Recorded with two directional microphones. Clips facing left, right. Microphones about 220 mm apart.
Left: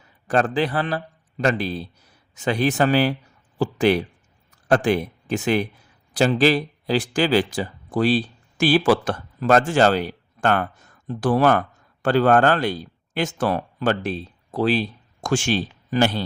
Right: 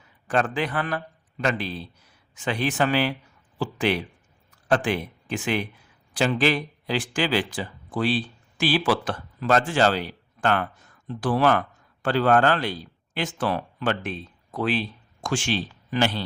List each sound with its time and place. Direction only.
0.3 s a man's voice: 40° left (ahead or behind)